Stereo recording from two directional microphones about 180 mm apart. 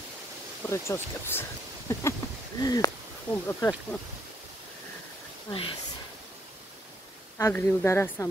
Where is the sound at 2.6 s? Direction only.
20° left (ahead or behind).